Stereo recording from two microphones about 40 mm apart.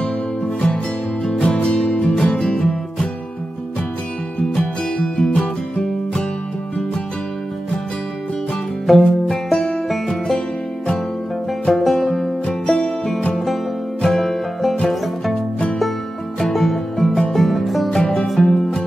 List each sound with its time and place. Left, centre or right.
1.4 s music: left
4.4 s music: left
8.8 s music: centre
11.6 s music: centre
12.4 s music: left
14.0 s music: centre
16.5 s music: centre